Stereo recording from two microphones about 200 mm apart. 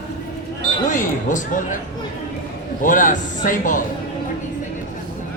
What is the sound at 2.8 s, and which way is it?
Speech, 40° left (ahead or behind).